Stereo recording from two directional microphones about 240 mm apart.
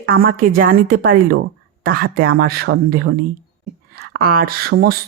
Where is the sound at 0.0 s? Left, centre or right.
Right.